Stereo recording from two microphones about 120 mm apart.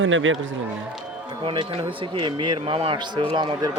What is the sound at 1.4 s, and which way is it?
A man's voice, 45° right (ahead or behind).